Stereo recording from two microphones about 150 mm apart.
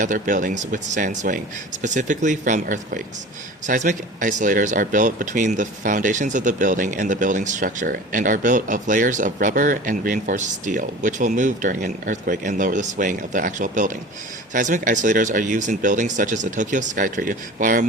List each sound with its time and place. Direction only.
0.0 s speech: 60° right (ahead or behind)